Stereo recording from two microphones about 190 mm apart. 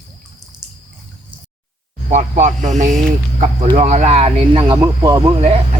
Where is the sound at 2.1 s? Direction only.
35° right (ahead or behind); by 5.2 s 20° right (ahead or behind).